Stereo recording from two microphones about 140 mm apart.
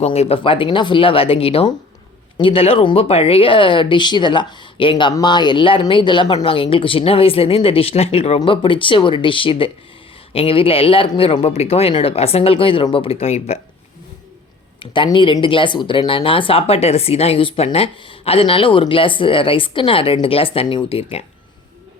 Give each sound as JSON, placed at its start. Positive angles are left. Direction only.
{"t": 0.0, "sound": "speech", "side_deg": 50}
{"t": 14.8, "sound": "speech", "side_deg": 35}